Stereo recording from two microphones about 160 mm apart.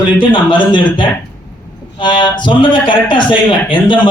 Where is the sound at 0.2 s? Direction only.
30° left (ahead or behind).